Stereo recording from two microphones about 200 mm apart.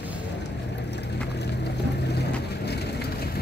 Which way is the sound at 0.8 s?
60° left (ahead or behind).